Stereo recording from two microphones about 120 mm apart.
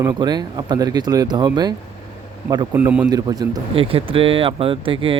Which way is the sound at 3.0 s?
35° right (ahead or behind).